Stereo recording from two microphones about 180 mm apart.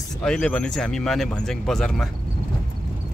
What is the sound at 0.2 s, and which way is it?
Speech, 5° left (ahead or behind).